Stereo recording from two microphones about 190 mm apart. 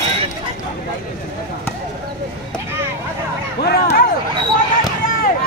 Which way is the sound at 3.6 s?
55° left (ahead or behind).